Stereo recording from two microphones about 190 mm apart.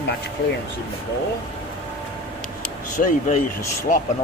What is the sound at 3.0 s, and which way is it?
Speech, 45° left (ahead or behind).